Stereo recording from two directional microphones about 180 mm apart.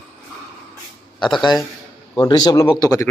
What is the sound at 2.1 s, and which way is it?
Speech, 20° left (ahead or behind).